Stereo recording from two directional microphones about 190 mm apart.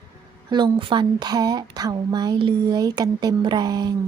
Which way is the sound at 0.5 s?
25° right (ahead or behind).